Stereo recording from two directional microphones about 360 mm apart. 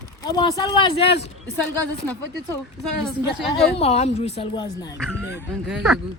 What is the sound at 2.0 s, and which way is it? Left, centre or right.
A woman's voice, centre.